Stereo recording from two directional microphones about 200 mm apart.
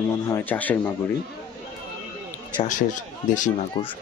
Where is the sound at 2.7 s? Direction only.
40° left (ahead or behind).